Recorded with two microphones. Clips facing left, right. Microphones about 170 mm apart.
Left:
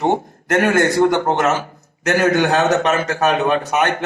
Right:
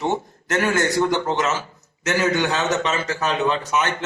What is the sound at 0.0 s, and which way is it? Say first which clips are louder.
A man's voice: left 5 dB; 55° left (ahead or behind).